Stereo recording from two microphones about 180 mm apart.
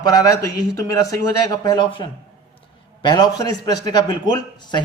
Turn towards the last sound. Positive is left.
turn(degrees=25)  # may be behind; listen again after turning